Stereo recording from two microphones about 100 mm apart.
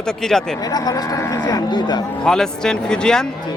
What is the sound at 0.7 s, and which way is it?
Speech, 40° left (ahead or behind).